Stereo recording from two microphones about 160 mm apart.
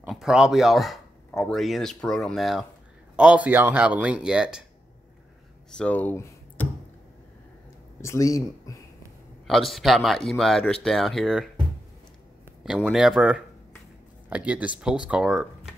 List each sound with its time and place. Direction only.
0.0 s speech: 5° right (ahead or behind)
5.8 s speech: 10° left (ahead or behind)
8.0 s speech: 20° left (ahead or behind)
9.5 s speech: centre (ahead or behind)
12.6 s speech: 5° right (ahead or behind)